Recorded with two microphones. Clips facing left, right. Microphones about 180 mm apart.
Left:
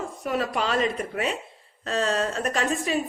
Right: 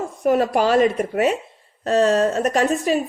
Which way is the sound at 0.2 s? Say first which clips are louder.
Right 10 dB; 50° right (ahead or behind).